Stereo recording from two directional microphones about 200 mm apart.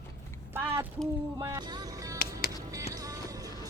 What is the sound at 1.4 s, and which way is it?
Music, 20° right (ahead or behind).